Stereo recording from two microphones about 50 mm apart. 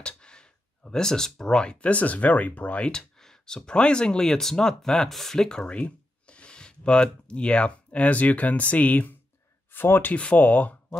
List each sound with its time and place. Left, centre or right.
0.0 s speech: centre
2.9 s speech: centre; by 9.1 s left
9.7 s speech: left
10.1 s speech: left